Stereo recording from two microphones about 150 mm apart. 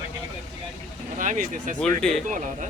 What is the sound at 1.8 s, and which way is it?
Speech, 5° left (ahead or behind).